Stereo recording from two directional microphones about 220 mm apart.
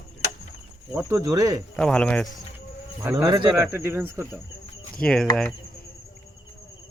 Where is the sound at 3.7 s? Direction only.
10° right (ahead or behind).